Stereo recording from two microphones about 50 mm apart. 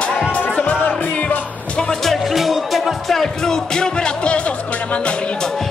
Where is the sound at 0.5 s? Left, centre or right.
Left.